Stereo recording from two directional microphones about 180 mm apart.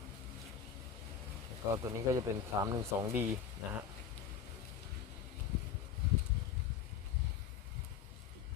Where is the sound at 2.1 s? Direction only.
20° right (ahead or behind).